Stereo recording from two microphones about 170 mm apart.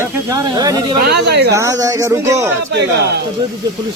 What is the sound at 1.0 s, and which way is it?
Speech, 80° right.